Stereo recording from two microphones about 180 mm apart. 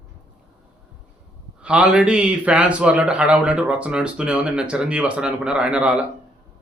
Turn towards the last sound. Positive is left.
turn(degrees=-5)  # may be behind; listen again after turning